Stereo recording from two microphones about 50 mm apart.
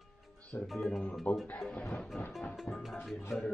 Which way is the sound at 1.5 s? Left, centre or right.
Centre.